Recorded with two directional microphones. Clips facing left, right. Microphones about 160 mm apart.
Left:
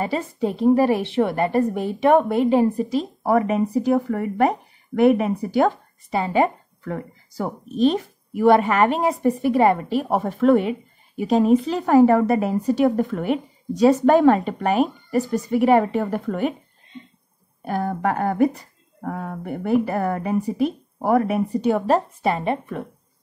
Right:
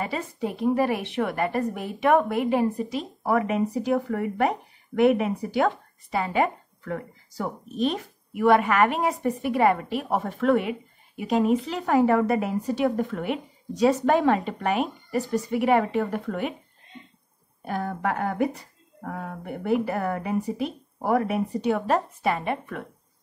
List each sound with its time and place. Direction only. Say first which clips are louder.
0.0 s a woman's voice: left 6 dB; 30° left (ahead or behind)
17.6 s a woman's voice: left 5 dB; 40° left (ahead or behind)
19.6 s a woman's voice: left 4 dB; 40° left (ahead or behind)